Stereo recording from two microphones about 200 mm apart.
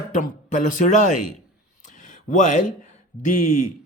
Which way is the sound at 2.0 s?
40° left (ahead or behind).